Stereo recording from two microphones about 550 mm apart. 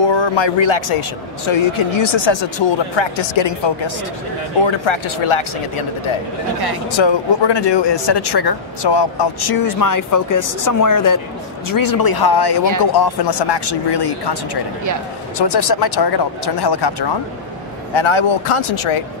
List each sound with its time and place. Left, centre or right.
0.0 s speech: left
6.9 s speech: left
17.9 s speech: left